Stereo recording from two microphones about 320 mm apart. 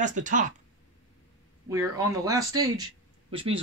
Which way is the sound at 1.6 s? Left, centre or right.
Centre.